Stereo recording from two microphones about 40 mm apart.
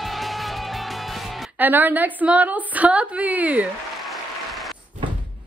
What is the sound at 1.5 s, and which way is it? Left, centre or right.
A woman's voice, right.